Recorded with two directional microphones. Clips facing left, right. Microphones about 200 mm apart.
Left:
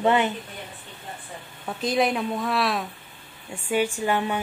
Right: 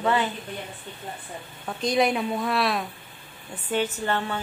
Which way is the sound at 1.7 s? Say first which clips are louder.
Even; 5° left (ahead or behind).